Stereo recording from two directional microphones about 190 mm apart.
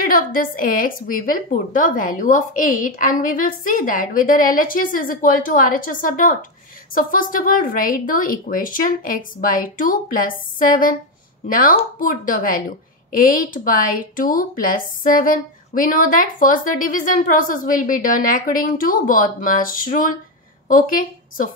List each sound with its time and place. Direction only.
0.0 s a woman's voice: 50° left (ahead or behind)